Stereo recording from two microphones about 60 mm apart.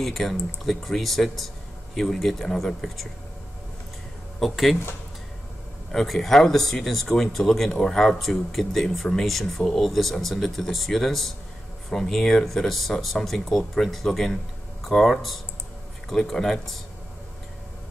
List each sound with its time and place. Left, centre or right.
0.0 s speech: centre
4.4 s speech: centre
5.9 s speech: centre